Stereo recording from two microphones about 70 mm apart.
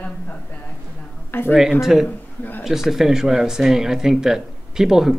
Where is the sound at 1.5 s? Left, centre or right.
Centre.